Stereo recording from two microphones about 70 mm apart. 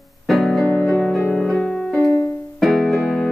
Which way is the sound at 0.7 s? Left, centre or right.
Left.